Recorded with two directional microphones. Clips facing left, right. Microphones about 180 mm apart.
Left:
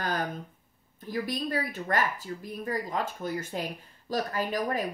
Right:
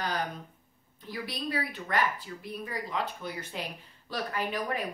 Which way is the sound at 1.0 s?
45° left (ahead or behind).